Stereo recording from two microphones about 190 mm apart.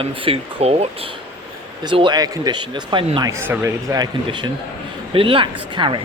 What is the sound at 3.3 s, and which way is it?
A man's voice, 10° right (ahead or behind).